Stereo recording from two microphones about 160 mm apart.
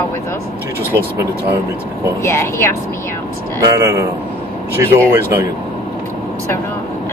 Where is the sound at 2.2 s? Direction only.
15° left (ahead or behind).